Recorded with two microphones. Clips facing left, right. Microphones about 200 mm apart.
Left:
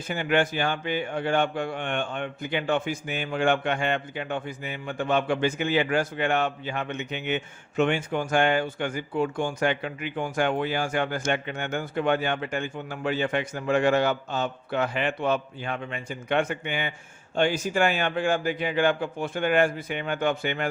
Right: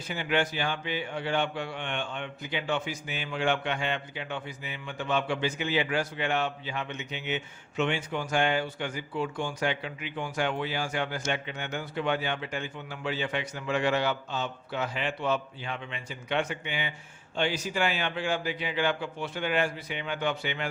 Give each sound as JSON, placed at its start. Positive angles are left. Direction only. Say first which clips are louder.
{"t": 0.1, "sound": "a man's voice", "louder": "left 4 dB", "side_deg": 50}